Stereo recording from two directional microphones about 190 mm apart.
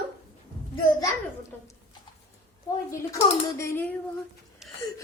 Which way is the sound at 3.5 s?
15° left (ahead or behind).